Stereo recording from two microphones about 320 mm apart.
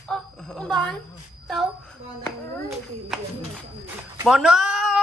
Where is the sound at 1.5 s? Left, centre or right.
Centre.